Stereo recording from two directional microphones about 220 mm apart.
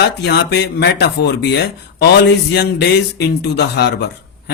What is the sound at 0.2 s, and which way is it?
Speech, 50° left (ahead or behind).